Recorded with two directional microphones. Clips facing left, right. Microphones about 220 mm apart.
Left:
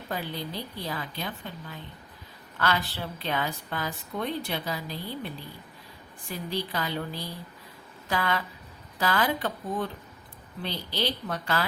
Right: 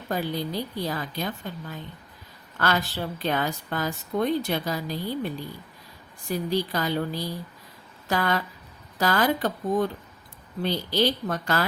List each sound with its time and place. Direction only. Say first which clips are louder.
0.1 s a woman's voice: right 6 dB; 40° right (ahead or behind)